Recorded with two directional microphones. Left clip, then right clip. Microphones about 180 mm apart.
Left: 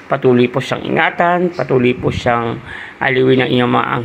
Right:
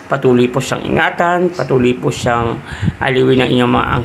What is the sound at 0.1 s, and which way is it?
Speech, 15° left (ahead or behind).